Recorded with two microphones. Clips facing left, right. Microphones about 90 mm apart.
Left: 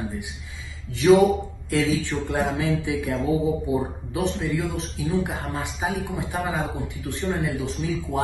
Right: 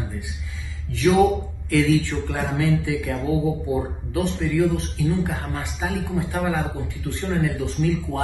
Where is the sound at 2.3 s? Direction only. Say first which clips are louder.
Left 2 dB; 20° left (ahead or behind).